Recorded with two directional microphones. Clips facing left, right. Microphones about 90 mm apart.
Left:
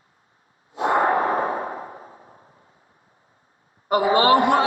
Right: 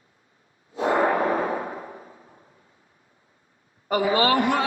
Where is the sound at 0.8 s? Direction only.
30° left (ahead or behind).